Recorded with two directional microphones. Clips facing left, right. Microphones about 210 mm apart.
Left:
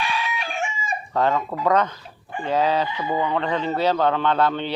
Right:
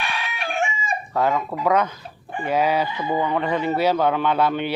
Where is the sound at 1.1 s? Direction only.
10° right (ahead or behind).